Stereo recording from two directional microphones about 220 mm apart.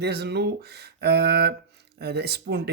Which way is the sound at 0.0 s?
50° right (ahead or behind).